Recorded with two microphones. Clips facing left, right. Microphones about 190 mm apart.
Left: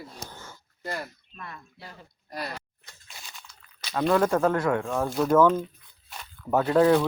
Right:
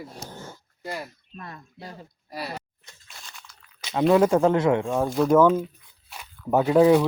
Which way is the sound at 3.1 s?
10° left (ahead or behind).